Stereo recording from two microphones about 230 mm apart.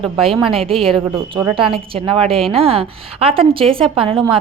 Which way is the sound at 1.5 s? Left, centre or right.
Right.